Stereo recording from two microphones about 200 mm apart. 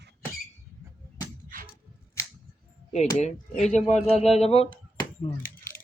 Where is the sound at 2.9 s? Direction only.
35° left (ahead or behind).